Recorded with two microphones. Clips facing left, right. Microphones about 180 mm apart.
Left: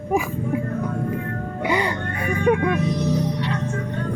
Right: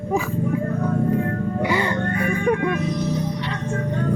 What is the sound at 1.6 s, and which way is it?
Music, 20° left (ahead or behind).